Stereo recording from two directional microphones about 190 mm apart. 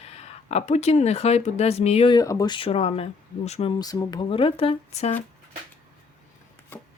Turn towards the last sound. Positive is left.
turn(degrees=35)  # may be behind; listen again after turning